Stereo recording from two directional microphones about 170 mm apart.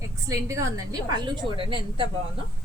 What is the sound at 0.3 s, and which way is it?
A woman's voice, 20° right (ahead or behind).